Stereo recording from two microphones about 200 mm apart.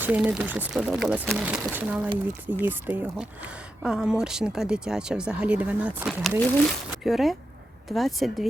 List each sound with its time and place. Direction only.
0.0 s speech: 10° right (ahead or behind)